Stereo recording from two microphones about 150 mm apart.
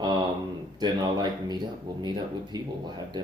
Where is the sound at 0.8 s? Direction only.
30° right (ahead or behind).